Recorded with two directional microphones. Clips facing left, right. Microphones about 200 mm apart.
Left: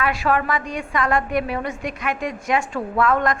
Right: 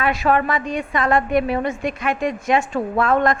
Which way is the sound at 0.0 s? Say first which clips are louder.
Right 2 dB; 20° right (ahead or behind).